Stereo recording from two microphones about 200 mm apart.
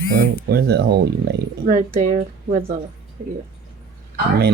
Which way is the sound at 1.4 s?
40° right (ahead or behind).